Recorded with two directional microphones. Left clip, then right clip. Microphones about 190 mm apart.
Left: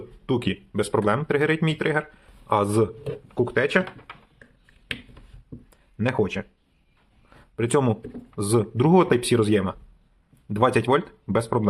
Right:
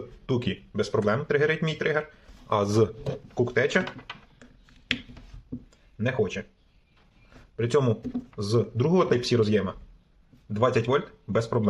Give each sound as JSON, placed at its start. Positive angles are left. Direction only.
{"t": 0.3, "sound": "speech", "side_deg": 20}
{"t": 2.8, "sound": "speech", "side_deg": 5}
{"t": 3.4, "sound": "speech", "side_deg": 20}
{"t": 5.7, "sound": "a sound", "side_deg": 30}
{"t": 7.5, "sound": "speech", "side_deg": 25}